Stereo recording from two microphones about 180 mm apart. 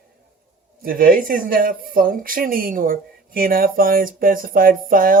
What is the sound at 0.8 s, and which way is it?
Speech, 55° right (ahead or behind).